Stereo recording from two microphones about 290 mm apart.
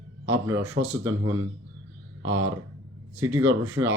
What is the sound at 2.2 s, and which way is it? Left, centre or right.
Speech, right.